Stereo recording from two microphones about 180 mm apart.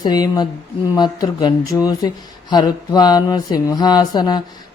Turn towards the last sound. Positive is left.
turn(degrees=20)  # may be behind; listen again after turning